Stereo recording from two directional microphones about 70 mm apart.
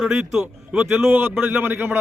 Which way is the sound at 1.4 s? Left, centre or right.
Right.